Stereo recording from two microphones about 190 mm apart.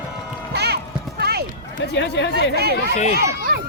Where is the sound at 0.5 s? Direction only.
60° right (ahead or behind).